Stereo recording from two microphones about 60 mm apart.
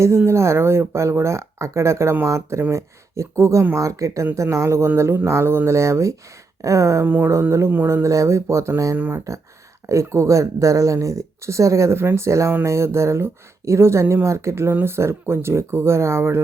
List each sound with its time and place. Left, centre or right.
0.3 s speech: right
3.8 s speech: right
7.0 s speech: right
8.0 s speech: right
9.0 s speech: right
9.9 s speech: right
14.7 s speech: right